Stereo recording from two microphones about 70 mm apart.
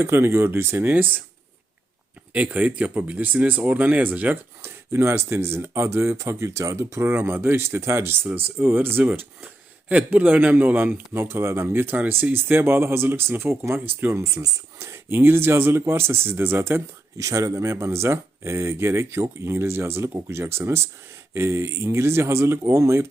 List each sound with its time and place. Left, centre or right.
0.0 s speech: right
0.9 s speech: right
2.3 s speech: right
4.6 s speech: right
11.2 s speech: right
14.1 s speech: right
17.2 s speech: right